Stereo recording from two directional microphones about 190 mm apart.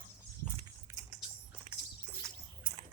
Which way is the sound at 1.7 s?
35° right (ahead or behind).